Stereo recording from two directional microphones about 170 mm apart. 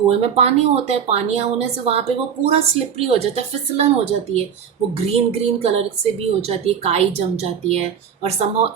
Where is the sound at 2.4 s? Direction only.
35° right (ahead or behind).